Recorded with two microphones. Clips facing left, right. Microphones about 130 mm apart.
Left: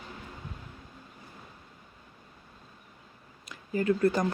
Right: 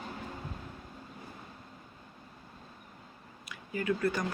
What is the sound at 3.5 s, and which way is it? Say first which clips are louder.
Speech: left 5 dB; 35° left (ahead or behind).